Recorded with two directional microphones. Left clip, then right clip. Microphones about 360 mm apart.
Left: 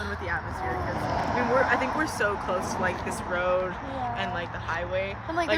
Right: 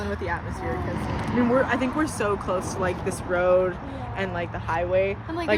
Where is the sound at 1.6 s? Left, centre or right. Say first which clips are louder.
Even; right.